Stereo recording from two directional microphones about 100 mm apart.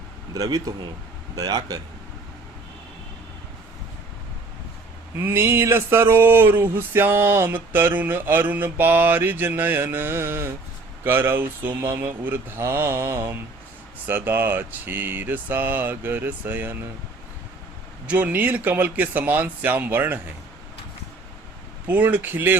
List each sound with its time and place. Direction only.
0.3 s speech: 35° right (ahead or behind)
5.1 s speech: 25° right (ahead or behind)
18.0 s speech: 15° right (ahead or behind)
21.8 s speech: 15° right (ahead or behind)